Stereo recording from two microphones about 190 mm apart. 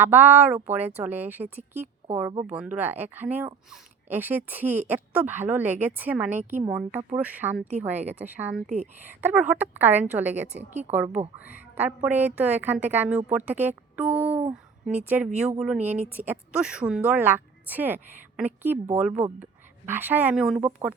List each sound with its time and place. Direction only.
0.0 s speech: 10° right (ahead or behind)
8.6 s a woman's voice: 35° right (ahead or behind)
9.0 s speech: 10° right (ahead or behind)